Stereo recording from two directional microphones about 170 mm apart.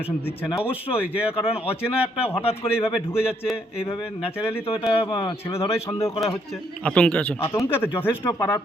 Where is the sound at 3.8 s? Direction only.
35° left (ahead or behind).